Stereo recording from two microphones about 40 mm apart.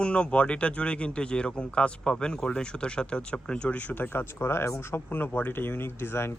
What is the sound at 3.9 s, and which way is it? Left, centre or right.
Speech, left.